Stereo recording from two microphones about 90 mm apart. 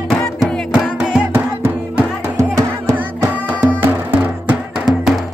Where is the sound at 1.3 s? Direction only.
25° right (ahead or behind).